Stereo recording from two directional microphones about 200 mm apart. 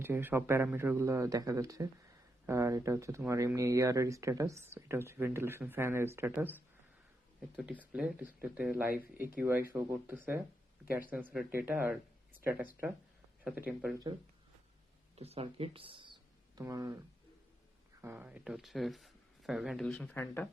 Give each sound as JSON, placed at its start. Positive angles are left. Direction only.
{"t": 0.0, "sound": "speech", "side_deg": -10}
{"t": 15.1, "sound": "speech", "side_deg": -30}
{"t": 18.0, "sound": "speech", "side_deg": -10}